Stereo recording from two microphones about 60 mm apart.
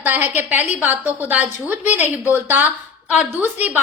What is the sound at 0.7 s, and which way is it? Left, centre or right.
A woman's voice, right.